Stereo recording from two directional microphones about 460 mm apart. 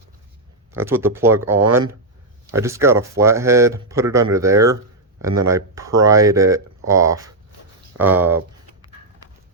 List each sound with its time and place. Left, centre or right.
0.7 s speech: centre
1.5 s speech: right
2.5 s speech: centre
7.9 s a sound: centre